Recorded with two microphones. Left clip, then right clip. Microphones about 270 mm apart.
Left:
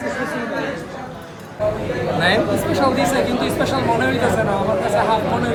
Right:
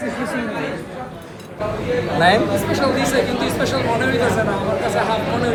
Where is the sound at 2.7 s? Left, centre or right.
Centre.